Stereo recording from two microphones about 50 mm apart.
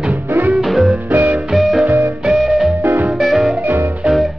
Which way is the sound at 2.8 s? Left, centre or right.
Right.